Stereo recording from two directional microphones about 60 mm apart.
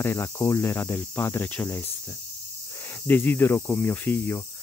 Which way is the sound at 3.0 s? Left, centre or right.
Left.